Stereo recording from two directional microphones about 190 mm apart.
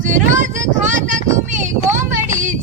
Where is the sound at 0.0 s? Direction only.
40° right (ahead or behind).